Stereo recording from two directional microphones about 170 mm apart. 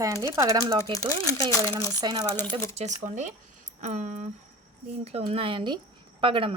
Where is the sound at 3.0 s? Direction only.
45° right (ahead or behind).